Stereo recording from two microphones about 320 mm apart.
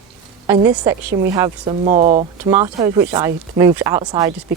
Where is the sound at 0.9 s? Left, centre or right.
Centre.